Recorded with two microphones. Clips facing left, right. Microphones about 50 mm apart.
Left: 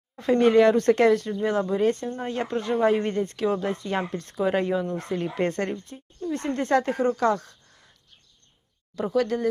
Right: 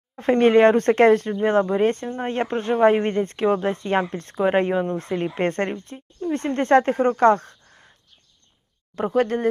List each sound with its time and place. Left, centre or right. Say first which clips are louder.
0.2 s speech: right 3 dB; right
9.0 s speech: right 3 dB; right